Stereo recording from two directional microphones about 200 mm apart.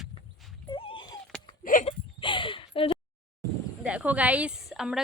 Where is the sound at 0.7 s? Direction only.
25° left (ahead or behind).